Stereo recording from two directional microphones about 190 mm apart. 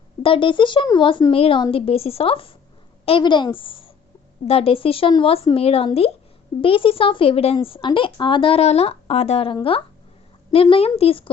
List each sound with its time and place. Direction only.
0.2 s speech: 25° left (ahead or behind)